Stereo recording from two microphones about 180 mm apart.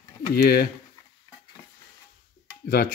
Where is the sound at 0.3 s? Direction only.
60° left (ahead or behind).